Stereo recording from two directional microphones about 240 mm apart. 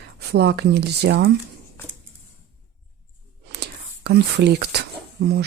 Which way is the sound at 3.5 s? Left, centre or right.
Right.